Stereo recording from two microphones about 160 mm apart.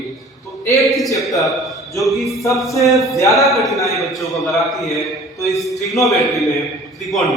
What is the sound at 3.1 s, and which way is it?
Speech, 20° left (ahead or behind).